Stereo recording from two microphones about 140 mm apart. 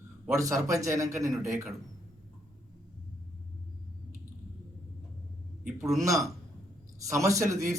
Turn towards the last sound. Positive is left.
turn(degrees=-20)  # may be behind; listen again after turning